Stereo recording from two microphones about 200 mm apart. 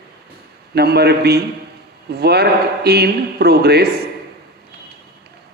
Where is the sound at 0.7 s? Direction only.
55° right (ahead or behind).